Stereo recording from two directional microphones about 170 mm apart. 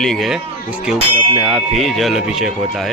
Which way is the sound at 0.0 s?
Centre (ahead or behind).